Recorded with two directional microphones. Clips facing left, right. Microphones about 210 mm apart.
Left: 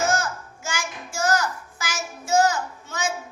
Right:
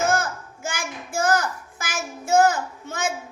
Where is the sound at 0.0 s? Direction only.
55° right (ahead or behind).